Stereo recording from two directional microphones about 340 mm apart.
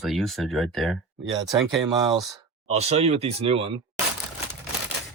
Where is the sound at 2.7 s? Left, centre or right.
Centre.